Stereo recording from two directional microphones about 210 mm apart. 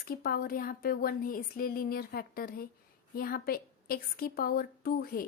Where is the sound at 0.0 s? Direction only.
45° left (ahead or behind).